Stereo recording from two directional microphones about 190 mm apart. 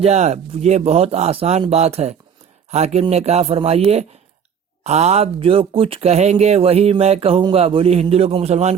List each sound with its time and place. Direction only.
0.0 s speech: 35° right (ahead or behind)